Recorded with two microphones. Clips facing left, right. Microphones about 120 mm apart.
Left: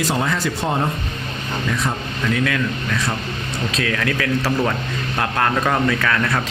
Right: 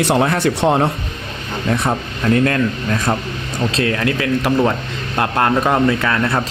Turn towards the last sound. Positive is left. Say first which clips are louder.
# right 3 dB
turn(degrees=-25)  # may be behind; listen again after turning